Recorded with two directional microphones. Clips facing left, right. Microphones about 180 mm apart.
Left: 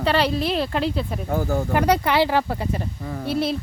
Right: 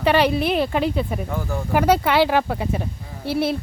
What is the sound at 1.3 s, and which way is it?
Speech, 40° left (ahead or behind).